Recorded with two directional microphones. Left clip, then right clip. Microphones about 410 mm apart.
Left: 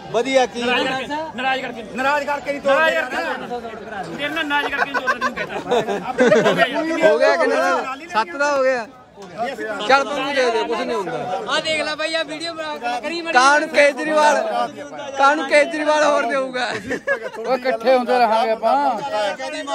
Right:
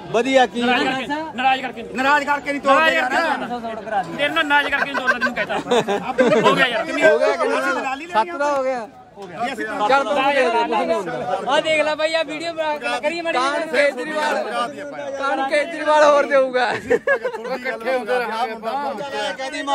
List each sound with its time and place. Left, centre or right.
0.1 s a man's voice: centre
4.7 s speech: centre
5.7 s a man's voice: centre
6.2 s a man's voice: centre
13.3 s a man's voice: centre
17.5 s speech: centre